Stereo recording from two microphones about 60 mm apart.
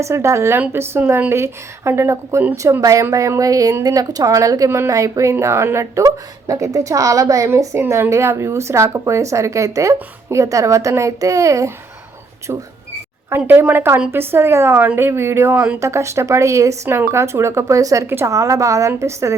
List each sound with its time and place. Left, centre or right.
0.0 s a woman's voice: right
2.8 s a woman's voice: right
13.3 s a woman's voice: right
15.8 s speech: right
18.0 s a woman's voice: right
18.3 s a woman's voice: right
18.9 s speech: right